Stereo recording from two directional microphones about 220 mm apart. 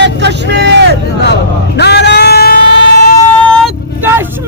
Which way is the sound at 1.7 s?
50° left (ahead or behind).